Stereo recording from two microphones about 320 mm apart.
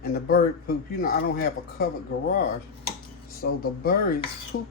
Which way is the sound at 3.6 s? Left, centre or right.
Left.